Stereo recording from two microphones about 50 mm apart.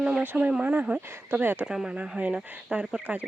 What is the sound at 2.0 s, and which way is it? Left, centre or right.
Speech, right.